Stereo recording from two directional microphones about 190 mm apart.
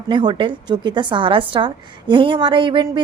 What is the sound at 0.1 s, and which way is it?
A woman's voice, 25° right (ahead or behind).